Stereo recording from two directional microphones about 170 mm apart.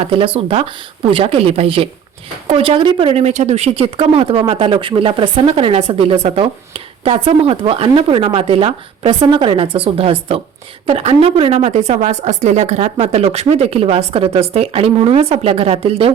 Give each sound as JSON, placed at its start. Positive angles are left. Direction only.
{"t": 0.1, "sound": "speech", "side_deg": -30}